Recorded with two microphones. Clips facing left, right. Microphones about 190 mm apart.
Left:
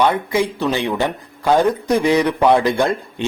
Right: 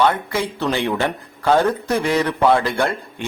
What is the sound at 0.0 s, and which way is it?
Speech, 15° left (ahead or behind).